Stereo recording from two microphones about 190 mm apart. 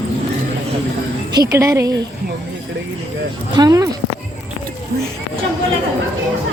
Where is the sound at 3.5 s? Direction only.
20° right (ahead or behind).